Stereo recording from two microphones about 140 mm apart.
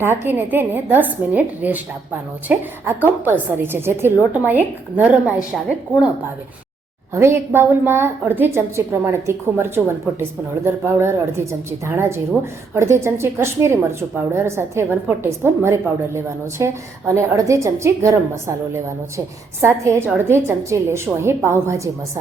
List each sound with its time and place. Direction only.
0.0 s a woman's voice: 15° right (ahead or behind)
7.1 s a woman's voice: 20° right (ahead or behind)